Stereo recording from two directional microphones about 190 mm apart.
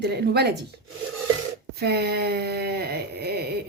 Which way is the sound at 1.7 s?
55° right (ahead or behind).